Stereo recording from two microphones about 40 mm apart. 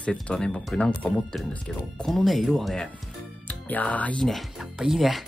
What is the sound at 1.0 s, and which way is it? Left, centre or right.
Speech, left.